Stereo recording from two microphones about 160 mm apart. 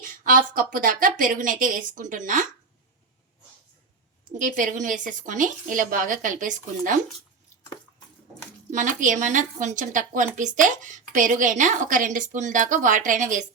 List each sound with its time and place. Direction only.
0.0 s a woman's voice: 60° right (ahead or behind)
4.4 s a woman's voice: 55° right (ahead or behind)
8.7 s a woman's voice: 55° right (ahead or behind)